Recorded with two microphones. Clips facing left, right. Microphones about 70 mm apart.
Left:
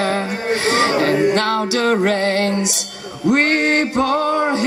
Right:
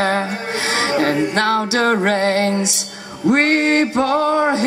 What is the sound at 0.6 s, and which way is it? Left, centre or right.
Speech, left.